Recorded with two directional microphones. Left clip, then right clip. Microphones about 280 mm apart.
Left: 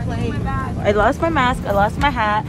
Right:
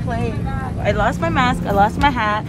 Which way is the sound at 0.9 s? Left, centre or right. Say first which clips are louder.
Left 3 dB; centre.